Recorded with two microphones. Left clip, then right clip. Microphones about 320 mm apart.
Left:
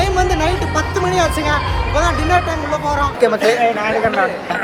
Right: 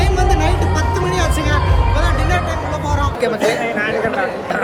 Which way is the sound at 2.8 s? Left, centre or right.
Centre.